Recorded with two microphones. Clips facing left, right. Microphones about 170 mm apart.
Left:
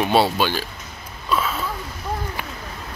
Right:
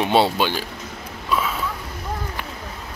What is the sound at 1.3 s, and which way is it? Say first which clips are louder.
Sniff: even; 15° right (ahead or behind).